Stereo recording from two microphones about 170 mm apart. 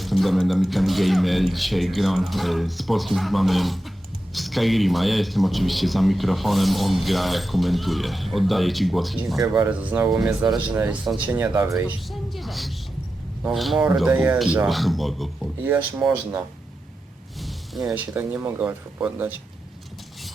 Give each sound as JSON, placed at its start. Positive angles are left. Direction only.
{"t": 0.0, "sound": "speech", "side_deg": 0}
{"t": 12.3, "sound": "a sound", "side_deg": 0}
{"t": 13.4, "sound": "speech", "side_deg": 0}
{"t": 15.6, "sound": "speech", "side_deg": -10}
{"t": 17.8, "sound": "speech", "side_deg": -10}